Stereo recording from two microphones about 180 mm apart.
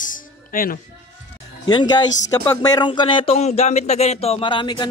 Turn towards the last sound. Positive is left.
turn(degrees=25)  # may be behind; listen again after turning